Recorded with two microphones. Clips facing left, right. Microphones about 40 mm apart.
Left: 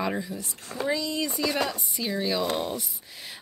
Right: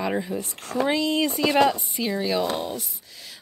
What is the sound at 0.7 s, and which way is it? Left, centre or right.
Speech, right.